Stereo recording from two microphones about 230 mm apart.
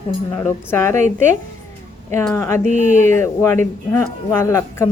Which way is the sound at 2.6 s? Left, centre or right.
Right.